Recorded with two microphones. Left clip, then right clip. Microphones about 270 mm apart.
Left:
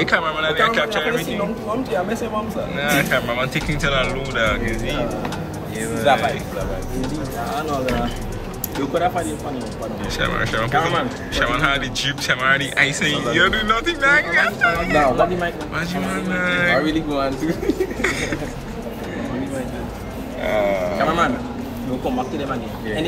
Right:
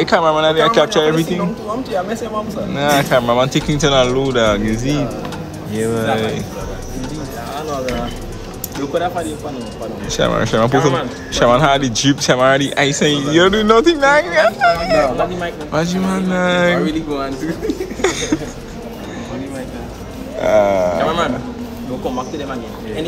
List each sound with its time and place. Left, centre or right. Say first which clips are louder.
0.0 s speech: right 6 dB; centre
2.7 s speech: right 5 dB; centre
8.9 s speech: right 2 dB; centre
16.8 s speech: right 1 dB; centre
20.4 s speech: right 7 dB; right